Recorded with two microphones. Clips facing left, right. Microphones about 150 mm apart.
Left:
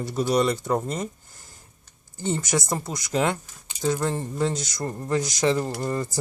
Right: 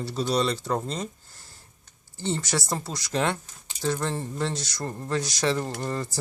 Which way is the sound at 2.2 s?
15° left (ahead or behind).